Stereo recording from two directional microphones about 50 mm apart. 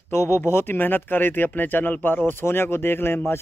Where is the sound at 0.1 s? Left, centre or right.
Left.